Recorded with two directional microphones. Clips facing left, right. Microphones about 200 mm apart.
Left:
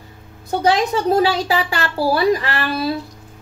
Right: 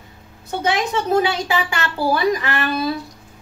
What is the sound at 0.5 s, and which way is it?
A woman's voice, 35° left (ahead or behind).